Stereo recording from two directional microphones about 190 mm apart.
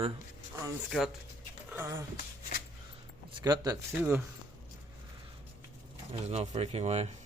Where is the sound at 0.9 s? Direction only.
Centre (ahead or behind).